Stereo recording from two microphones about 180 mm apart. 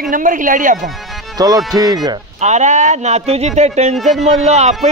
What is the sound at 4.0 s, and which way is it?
Speech, centre (ahead or behind).